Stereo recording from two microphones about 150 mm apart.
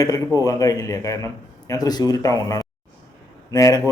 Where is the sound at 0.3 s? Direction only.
25° left (ahead or behind).